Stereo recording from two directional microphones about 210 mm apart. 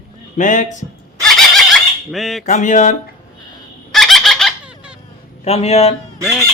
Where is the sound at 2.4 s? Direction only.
35° left (ahead or behind).